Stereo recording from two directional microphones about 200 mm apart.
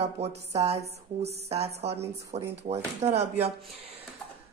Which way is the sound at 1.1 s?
30° right (ahead or behind).